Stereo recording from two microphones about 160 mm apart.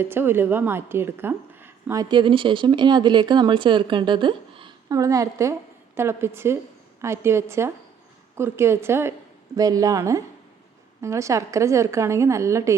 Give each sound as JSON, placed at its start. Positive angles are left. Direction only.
{"t": 0.0, "sound": "a woman's voice", "side_deg": -15}